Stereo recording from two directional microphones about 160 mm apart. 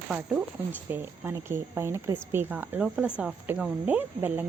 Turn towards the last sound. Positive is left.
turn(degrees=-10)  # may be behind; listen again after turning